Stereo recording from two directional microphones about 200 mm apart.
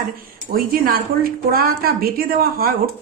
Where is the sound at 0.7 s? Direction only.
45° right (ahead or behind).